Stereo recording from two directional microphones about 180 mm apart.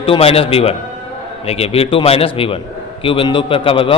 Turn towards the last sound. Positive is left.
turn(degrees=30)  # may be behind; listen again after turning